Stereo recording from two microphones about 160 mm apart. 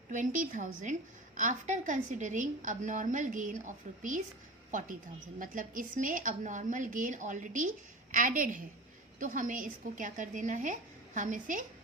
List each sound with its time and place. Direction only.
0.1 s a woman's voice: 50° right (ahead or behind)
5.4 s a woman's voice: 55° right (ahead or behind)